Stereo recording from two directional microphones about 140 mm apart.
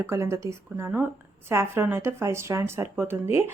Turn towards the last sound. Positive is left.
turn(degrees=-15)  # may be behind; listen again after turning